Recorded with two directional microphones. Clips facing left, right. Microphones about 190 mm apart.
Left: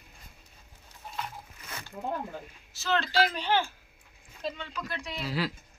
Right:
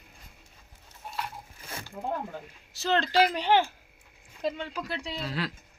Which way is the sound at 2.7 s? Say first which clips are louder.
Right 3 dB; 15° right (ahead or behind).